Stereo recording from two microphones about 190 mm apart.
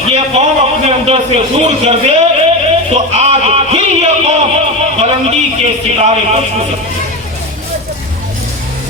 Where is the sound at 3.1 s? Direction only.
35° right (ahead or behind).